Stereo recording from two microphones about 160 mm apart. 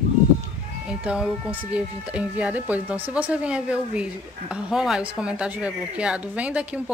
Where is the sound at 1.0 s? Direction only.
5° right (ahead or behind).